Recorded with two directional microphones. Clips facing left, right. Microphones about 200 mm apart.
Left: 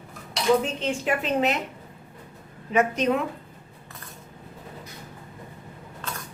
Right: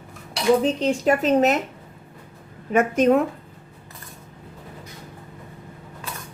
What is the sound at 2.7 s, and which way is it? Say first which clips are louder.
Speech: right 5 dB; 50° right (ahead or behind).